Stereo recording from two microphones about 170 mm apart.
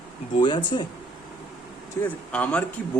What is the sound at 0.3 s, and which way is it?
Speech, 30° left (ahead or behind).